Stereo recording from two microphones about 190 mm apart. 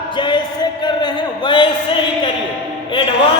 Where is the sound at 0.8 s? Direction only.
25° left (ahead or behind).